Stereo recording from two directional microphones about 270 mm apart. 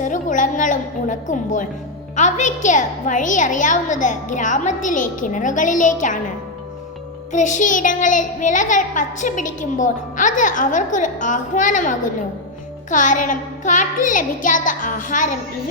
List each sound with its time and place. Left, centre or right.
0.0 s a woman's voice: left
7.3 s a child's voice: left